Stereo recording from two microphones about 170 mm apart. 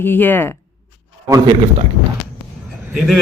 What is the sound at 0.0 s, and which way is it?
Speech, 10° left (ahead or behind).